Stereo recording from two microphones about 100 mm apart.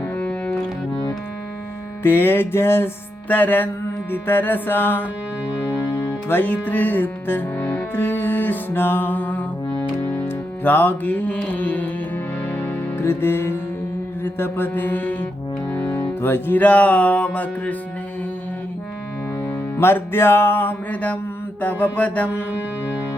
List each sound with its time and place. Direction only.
0.2 s music: 10° left (ahead or behind)
2.0 s music: 20° left (ahead or behind)
6.1 s music: 20° left (ahead or behind)
19.5 s music: 25° left (ahead or behind)